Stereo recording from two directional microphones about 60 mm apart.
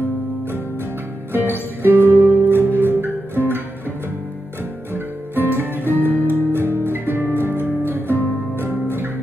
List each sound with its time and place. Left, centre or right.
1.3 s music: right
4.9 s music: right